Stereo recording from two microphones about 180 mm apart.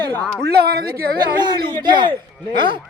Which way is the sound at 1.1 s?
25° right (ahead or behind).